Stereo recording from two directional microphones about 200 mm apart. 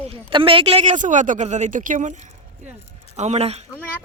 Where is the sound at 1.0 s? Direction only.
40° right (ahead or behind).